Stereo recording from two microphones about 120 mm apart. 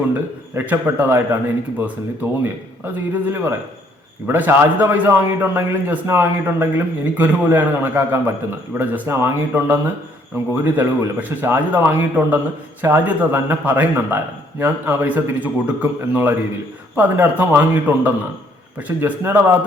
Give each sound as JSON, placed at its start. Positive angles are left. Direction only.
{"t": 0.1, "sound": "a man's voice", "side_deg": -15}
{"t": 2.4, "sound": "a man's voice", "side_deg": -20}